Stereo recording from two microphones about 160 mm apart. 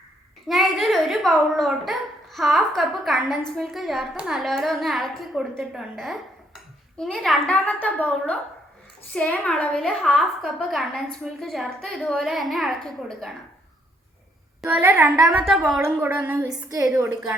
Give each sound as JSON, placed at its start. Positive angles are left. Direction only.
{"t": 0.4, "sound": "a woman's voice", "side_deg": 0}
{"t": 14.7, "sound": "a woman's voice", "side_deg": -10}
{"t": 16.0, "sound": "a woman's voice", "side_deg": -15}